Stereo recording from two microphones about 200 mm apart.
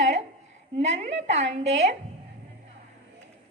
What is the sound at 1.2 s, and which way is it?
Speech, 35° right (ahead or behind).